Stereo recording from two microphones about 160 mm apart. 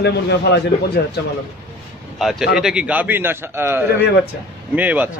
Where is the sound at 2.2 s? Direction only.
Centre (ahead or behind).